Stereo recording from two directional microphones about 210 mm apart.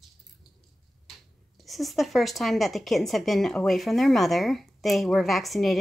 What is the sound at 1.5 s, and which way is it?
A woman's voice, centre (ahead or behind).